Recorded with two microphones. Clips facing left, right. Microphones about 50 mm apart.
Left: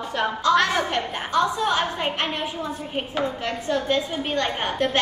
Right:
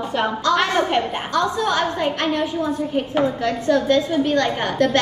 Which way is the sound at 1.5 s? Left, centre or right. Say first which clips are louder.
Right 3 dB; left.